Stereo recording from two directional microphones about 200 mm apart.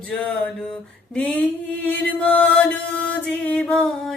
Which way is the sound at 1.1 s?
5° left (ahead or behind).